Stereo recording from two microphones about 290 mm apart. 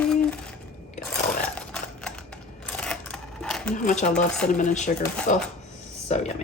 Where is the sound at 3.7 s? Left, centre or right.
Left.